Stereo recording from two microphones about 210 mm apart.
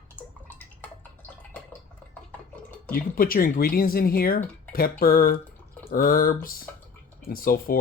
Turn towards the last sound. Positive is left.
turn(degrees=45)  # may be behind; listen again after turning